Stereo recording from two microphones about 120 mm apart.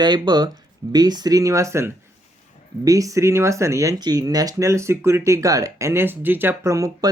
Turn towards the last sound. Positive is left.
turn(degrees=-30)  # may be behind; listen again after turning